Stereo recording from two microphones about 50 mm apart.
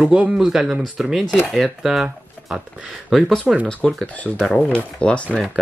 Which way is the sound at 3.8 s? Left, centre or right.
Centre.